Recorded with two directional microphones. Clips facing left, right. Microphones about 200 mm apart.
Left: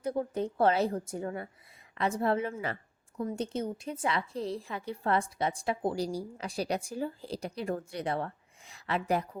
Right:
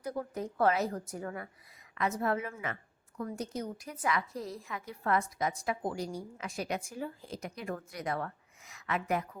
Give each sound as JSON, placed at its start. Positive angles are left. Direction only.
{"t": 0.0, "sound": "a woman's voice", "side_deg": 30}